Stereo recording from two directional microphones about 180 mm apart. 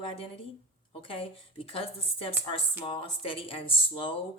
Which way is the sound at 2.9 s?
30° left (ahead or behind).